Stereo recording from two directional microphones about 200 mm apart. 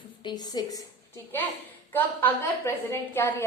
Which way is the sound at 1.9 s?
10° left (ahead or behind).